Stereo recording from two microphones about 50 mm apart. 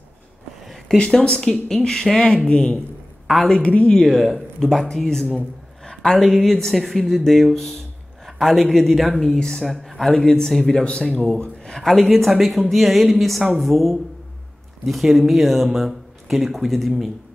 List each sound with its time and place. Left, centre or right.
0.9 s speech: centre
4.0 s speech: centre
6.2 s speech: centre; by 11.2 s left
11.6 s speech: centre